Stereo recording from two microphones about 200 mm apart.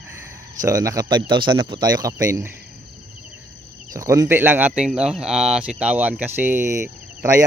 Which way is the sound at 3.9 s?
15° right (ahead or behind).